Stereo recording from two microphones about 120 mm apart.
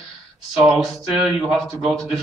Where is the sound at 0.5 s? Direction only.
5° right (ahead or behind).